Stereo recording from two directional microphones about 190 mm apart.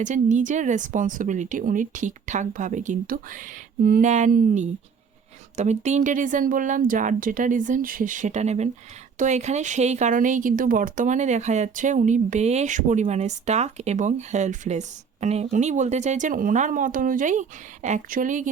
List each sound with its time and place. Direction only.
0.0 s speech: 40° right (ahead or behind)